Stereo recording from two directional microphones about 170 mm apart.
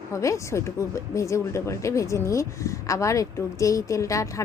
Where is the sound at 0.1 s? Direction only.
20° left (ahead or behind).